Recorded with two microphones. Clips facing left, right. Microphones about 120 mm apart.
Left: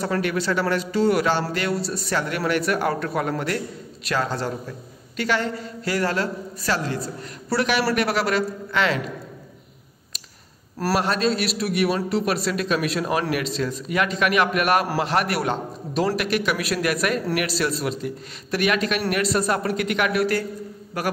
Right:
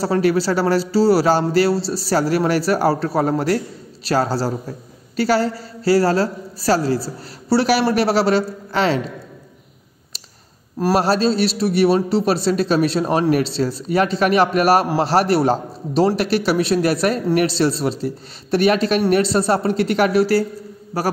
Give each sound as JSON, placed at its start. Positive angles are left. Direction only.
{"t": 0.0, "sound": "a man's voice", "side_deg": -35}
{"t": 11.0, "sound": "a man's voice", "side_deg": -35}